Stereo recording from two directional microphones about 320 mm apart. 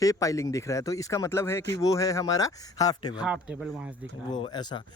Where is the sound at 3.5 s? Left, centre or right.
Centre.